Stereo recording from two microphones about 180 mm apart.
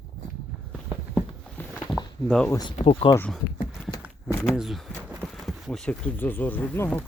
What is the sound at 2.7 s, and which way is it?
Speech, 35° left (ahead or behind).